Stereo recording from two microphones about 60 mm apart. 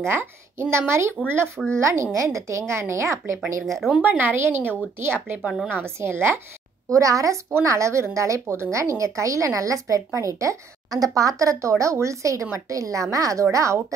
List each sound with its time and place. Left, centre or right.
0.1 s speech: right
1.8 s speech: right
3.6 s speech: centre
4.0 s speech: right
6.9 s a woman's voice: right